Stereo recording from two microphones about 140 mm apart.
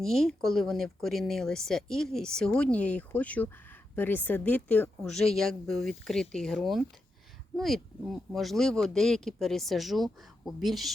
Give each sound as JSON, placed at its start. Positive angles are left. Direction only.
{"t": 0.0, "sound": "speech", "side_deg": 0}